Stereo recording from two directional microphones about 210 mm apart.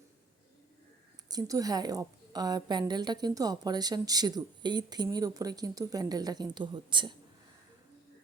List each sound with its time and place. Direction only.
1.3 s a woman's voice: 15° right (ahead or behind)